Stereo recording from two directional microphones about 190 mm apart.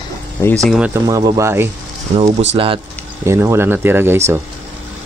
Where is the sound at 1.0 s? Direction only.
20° right (ahead or behind).